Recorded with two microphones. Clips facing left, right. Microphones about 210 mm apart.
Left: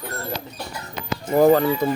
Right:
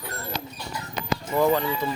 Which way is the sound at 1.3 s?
45° left (ahead or behind).